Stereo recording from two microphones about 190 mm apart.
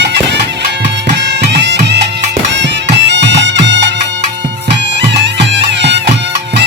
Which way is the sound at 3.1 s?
70° right (ahead or behind).